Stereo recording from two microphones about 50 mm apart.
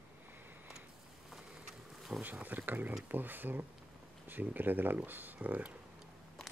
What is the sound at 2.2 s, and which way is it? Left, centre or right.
Speech, right.